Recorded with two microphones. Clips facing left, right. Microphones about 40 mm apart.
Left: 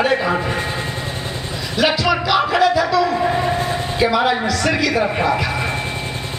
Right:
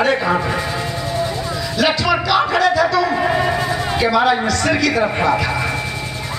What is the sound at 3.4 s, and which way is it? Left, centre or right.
Music, right.